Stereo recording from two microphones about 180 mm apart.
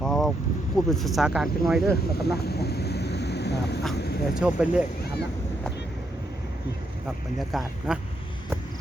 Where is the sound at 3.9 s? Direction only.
65° left (ahead or behind).